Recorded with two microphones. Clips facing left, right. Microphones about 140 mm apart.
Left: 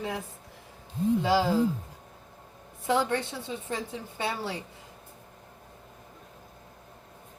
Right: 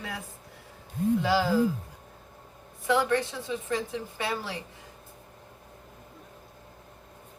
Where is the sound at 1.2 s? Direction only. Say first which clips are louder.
Left 2 dB; 25° left (ahead or behind).